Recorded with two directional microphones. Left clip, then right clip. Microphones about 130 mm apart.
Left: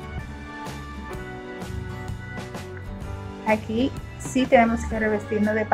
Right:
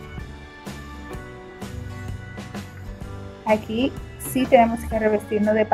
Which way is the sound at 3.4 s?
15° right (ahead or behind).